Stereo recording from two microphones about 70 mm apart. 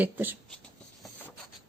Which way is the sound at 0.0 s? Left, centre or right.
Right.